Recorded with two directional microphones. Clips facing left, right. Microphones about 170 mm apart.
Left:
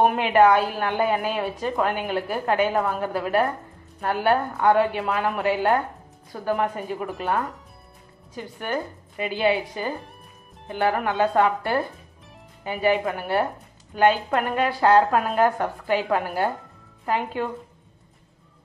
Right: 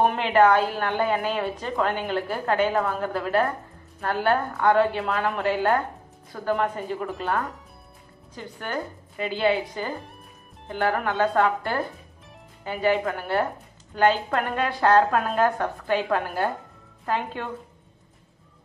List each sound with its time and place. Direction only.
0.0 s a woman's voice: 10° left (ahead or behind)